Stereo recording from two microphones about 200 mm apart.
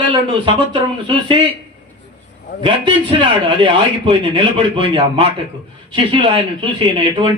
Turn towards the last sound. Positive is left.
turn(degrees=-25)  # may be behind; listen again after turning